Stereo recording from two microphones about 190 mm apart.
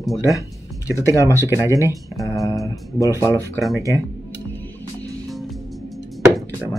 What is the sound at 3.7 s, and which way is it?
Speech, 15° right (ahead or behind).